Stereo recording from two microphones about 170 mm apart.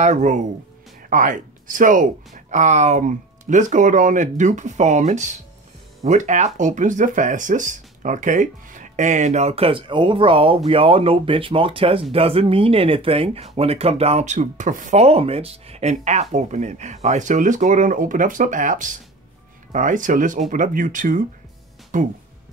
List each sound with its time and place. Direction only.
0.0 s speech: 45° right (ahead or behind)